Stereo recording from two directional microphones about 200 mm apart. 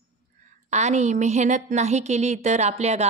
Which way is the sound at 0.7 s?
35° right (ahead or behind).